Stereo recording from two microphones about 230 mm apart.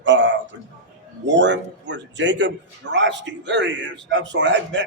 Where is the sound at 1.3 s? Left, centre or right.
Right.